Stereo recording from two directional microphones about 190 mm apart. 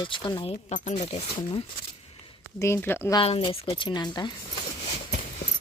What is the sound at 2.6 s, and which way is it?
Speech, 15° left (ahead or behind).